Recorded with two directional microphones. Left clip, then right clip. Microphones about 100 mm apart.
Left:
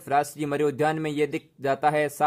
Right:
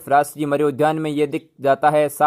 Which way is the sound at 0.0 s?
25° right (ahead or behind).